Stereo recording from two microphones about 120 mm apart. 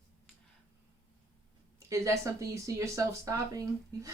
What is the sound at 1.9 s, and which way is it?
Speech, 25° right (ahead or behind).